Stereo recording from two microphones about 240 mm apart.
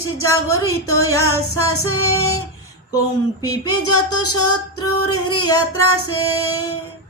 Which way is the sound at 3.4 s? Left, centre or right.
Centre.